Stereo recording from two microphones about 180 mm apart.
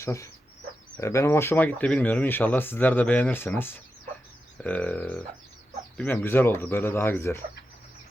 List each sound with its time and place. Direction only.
0.0 s speech: 15° left (ahead or behind)